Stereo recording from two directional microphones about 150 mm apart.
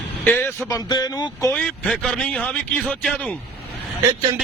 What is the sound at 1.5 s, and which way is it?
Speech, 10° left (ahead or behind).